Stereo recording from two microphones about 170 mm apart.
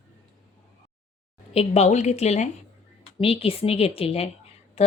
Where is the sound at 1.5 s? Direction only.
40° left (ahead or behind).